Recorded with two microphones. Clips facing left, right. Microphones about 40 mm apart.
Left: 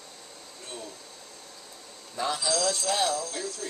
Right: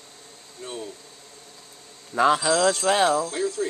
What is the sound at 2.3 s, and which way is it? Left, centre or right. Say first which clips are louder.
Speech: right 7 dB; right.